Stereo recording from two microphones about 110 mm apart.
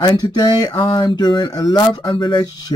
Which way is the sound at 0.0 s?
40° left (ahead or behind).